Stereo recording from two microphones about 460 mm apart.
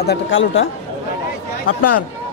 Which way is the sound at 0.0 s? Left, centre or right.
Left.